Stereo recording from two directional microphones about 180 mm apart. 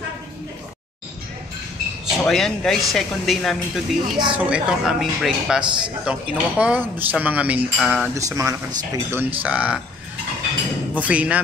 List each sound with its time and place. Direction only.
2.2 s a woman's voice: centre (ahead or behind)
11.0 s a woman's voice: 5° right (ahead or behind)